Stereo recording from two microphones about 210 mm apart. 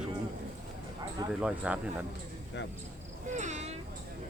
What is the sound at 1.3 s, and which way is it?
Speech, 5° right (ahead or behind).